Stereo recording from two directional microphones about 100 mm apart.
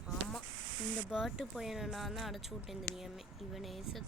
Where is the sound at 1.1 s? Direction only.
5° right (ahead or behind).